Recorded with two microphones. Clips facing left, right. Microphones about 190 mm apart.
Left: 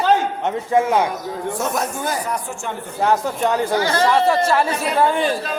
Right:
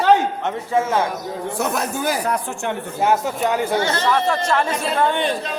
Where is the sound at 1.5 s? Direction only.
65° right (ahead or behind).